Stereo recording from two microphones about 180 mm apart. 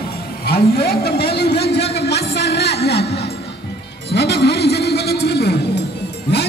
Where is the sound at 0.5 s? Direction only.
60° left (ahead or behind).